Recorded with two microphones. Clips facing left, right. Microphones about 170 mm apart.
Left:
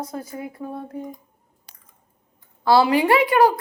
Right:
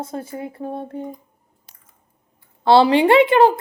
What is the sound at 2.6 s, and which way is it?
Speech, 25° right (ahead or behind).